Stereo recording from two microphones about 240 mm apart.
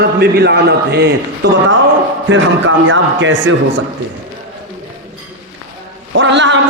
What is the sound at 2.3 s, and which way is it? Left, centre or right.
A man's voice, right.